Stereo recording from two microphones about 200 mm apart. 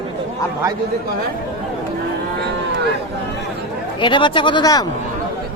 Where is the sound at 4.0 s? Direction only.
25° left (ahead or behind).